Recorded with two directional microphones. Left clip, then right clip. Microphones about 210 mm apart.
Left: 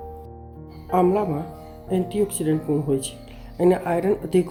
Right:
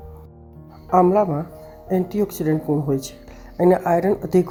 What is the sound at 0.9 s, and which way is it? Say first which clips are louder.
Speech: right 4 dB; 20° right (ahead or behind).